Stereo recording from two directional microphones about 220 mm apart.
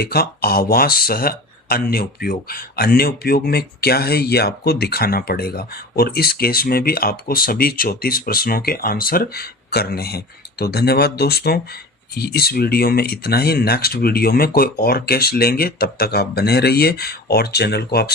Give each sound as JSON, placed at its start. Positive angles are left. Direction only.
{"t": 0.0, "sound": "speech", "side_deg": 45}